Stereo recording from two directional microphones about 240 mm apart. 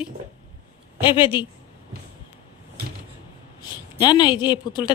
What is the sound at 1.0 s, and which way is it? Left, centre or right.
Speech, left.